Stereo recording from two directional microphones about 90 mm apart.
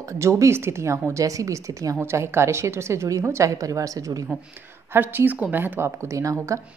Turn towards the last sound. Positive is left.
turn(degrees=-35)  # may be behind; listen again after turning